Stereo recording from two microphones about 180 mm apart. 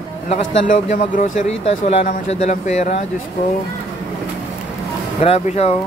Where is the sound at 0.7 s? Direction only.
40° left (ahead or behind).